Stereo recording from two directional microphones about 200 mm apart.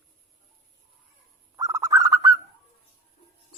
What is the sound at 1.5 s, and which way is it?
Bird, 15° right (ahead or behind).